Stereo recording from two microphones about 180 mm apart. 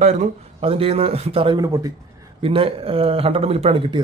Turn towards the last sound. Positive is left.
turn(degrees=-30)  # may be behind; listen again after turning